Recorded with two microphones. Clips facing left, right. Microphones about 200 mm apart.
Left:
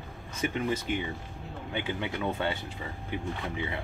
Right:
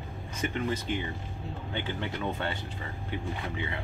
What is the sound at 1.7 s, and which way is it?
Speech, 15° left (ahead or behind).